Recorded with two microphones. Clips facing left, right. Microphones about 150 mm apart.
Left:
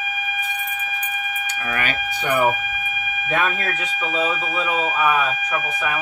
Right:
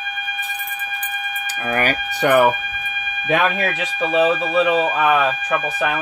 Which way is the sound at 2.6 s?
5° left (ahead or behind).